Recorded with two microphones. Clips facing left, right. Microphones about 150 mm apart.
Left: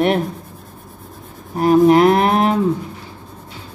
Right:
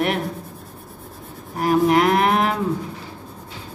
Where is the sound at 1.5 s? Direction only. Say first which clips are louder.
Left 6 dB; 30° left (ahead or behind).